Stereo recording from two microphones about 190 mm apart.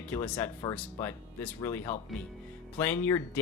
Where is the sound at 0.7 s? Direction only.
10° left (ahead or behind).